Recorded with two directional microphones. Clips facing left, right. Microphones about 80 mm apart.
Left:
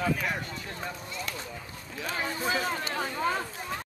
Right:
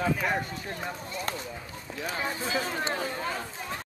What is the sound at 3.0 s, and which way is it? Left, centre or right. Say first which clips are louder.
Speech: left 3 dB; left.